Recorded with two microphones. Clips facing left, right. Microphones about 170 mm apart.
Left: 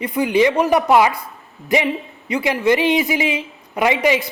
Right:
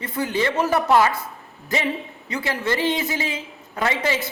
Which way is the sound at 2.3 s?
15° left (ahead or behind).